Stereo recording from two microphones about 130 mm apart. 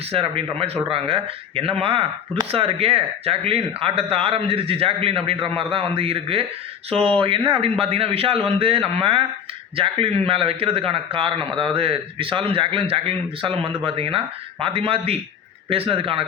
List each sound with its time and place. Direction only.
0.1 s speech: 45° right (ahead or behind)